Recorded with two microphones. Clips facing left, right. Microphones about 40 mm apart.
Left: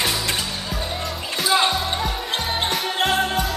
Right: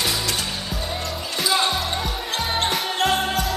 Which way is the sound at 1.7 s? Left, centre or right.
Centre.